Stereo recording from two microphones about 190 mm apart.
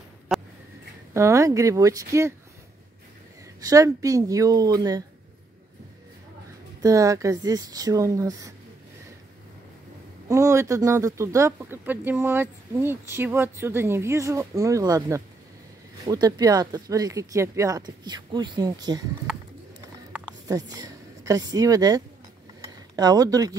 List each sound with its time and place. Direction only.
0.3 s a sound: centre (ahead or behind)
1.1 s speech: 15° right (ahead or behind)
3.6 s speech: 20° right (ahead or behind)
6.8 s speech: 15° right (ahead or behind)
10.2 s speech: 15° right (ahead or behind)
20.4 s speech: 20° right (ahead or behind)
22.6 s a sound: 20° right (ahead or behind)